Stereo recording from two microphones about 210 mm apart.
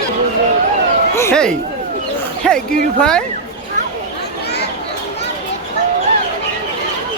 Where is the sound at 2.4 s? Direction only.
5° left (ahead or behind).